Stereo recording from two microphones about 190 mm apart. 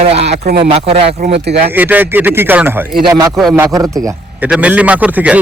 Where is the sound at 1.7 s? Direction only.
10° right (ahead or behind).